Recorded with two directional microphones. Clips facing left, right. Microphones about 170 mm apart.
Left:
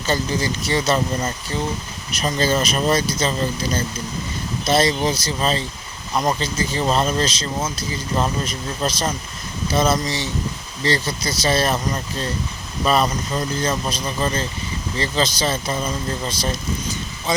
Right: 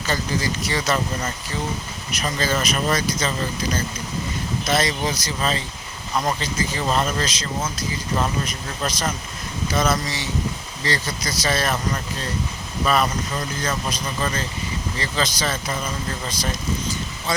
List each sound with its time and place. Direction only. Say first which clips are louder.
0.1 s speech: left 3 dB; 25° left (ahead or behind)
4.6 s speech: left 5 dB; 30° left (ahead or behind)
12.8 s speech: left 2 dB; 25° left (ahead or behind)